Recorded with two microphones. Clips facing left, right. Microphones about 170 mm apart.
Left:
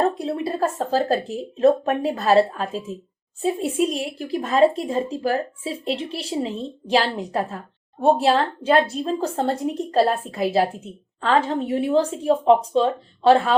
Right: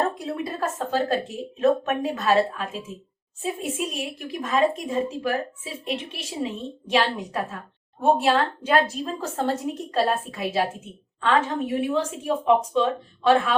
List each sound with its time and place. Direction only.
0.0 s a woman's voice: 30° left (ahead or behind)